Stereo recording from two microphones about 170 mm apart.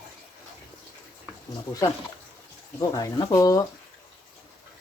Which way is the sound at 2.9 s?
20° left (ahead or behind).